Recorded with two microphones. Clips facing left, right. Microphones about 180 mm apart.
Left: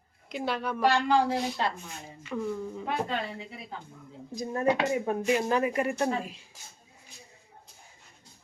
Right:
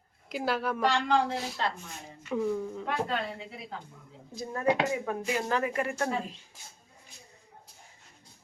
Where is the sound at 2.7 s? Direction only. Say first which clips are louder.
Left 1 dB; 5° left (ahead or behind).